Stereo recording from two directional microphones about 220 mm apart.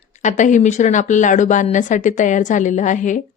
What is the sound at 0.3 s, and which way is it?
Speech, 35° left (ahead or behind).